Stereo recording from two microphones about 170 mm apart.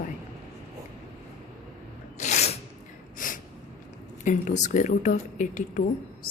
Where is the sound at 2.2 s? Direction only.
40° left (ahead or behind).